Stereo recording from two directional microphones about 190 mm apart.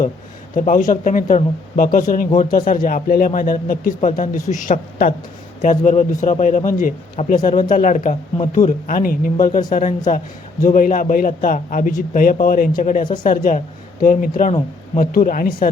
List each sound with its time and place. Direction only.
0.5 s a man's voice: 45° left (ahead or behind)